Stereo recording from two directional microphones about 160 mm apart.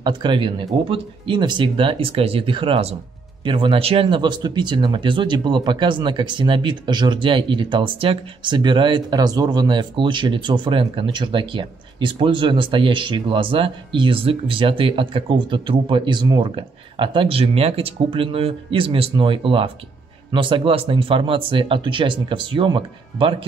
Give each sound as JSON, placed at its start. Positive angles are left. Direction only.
{"t": 0.0, "sound": "speech", "side_deg": -30}